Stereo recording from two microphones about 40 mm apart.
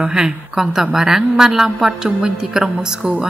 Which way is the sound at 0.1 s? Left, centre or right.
Centre.